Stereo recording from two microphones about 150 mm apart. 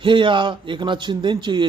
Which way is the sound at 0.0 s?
35° right (ahead or behind).